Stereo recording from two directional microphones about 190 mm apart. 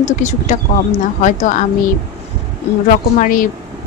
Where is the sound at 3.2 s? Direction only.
45° left (ahead or behind).